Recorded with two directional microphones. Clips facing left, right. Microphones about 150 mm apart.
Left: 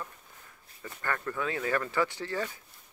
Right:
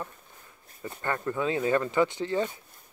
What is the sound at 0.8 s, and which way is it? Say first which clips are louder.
Speech: right 4 dB; 20° right (ahead or behind).